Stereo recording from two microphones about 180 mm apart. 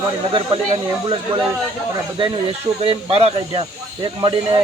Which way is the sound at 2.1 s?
30° right (ahead or behind).